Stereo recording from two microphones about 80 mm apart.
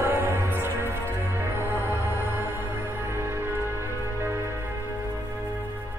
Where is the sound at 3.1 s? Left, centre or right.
Right.